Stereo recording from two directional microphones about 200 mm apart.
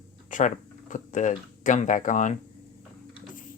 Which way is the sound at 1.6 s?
40° left (ahead or behind).